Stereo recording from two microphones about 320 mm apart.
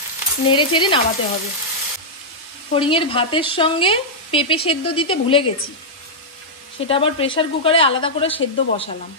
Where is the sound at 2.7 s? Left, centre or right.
Centre.